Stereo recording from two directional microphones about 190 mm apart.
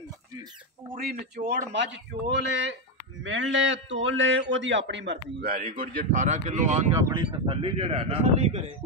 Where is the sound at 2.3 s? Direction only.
70° right (ahead or behind).